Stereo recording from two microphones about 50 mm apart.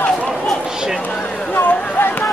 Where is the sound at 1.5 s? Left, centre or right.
Left.